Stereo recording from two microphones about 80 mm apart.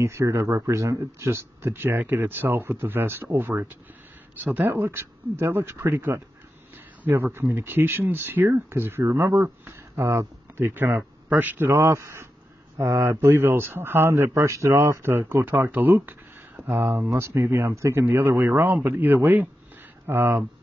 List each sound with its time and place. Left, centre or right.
0.0 s speech: right